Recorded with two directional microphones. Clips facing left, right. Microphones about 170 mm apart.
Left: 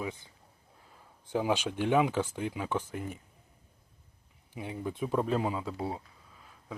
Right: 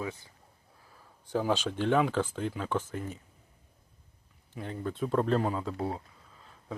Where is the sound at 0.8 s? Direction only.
20° left (ahead or behind).